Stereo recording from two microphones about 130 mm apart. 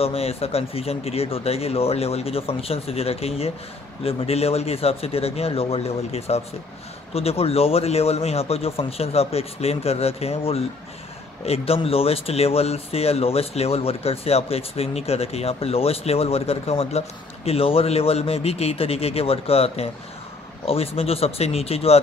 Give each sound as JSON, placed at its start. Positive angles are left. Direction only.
{"t": 0.0, "sound": "speech", "side_deg": 50}